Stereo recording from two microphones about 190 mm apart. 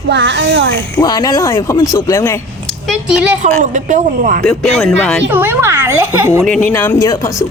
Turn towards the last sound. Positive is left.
turn(degrees=15)  # may be behind; listen again after turning